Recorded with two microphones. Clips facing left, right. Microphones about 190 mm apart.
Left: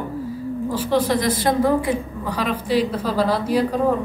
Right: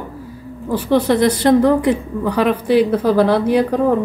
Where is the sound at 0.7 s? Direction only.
60° right (ahead or behind).